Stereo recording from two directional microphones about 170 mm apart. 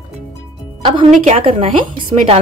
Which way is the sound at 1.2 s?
40° right (ahead or behind).